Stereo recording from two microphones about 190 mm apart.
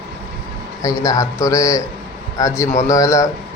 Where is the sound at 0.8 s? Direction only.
20° left (ahead or behind).